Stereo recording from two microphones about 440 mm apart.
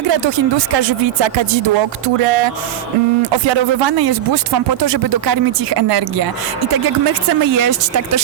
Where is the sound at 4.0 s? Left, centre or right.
Right.